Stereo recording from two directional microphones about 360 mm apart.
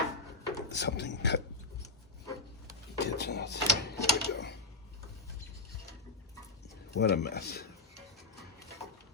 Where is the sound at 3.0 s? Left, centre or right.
Left.